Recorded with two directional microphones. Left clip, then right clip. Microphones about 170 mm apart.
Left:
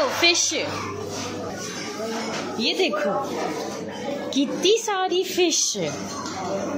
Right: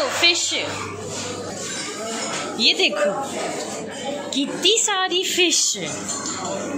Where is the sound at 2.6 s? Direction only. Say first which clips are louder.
Right 5 dB; 10° left (ahead or behind).